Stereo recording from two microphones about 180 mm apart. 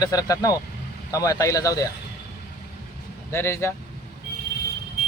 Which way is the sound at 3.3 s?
15° left (ahead or behind).